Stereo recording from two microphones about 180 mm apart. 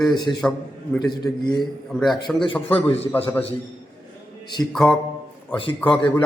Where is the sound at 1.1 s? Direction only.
25° left (ahead or behind).